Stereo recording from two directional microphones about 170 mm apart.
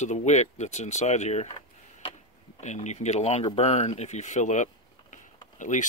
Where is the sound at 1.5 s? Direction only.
30° left (ahead or behind).